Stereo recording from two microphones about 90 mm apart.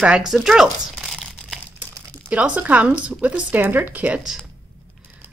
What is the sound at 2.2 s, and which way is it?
Speech, 15° right (ahead or behind).